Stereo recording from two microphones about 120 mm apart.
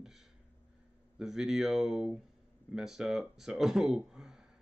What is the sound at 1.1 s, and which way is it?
Speech, 5° right (ahead or behind).